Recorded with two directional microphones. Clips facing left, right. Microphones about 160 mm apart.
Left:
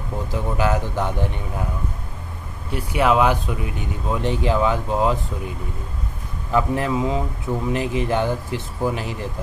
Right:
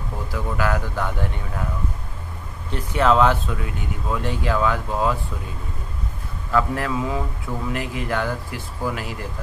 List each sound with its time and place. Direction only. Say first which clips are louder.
0.3 s speech: left 2 dB; 20° left (ahead or behind)
2.7 s speech: even; 10° left (ahead or behind)
6.5 s speech: left 2 dB; 20° left (ahead or behind)